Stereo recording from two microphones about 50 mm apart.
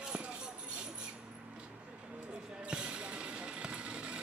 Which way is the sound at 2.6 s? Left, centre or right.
Right.